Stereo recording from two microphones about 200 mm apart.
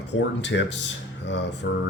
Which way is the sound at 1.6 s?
55° left (ahead or behind).